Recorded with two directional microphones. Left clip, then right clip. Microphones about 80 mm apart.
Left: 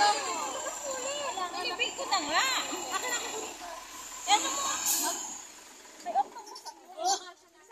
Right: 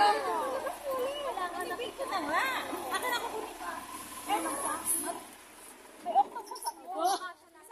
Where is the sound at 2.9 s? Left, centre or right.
Centre.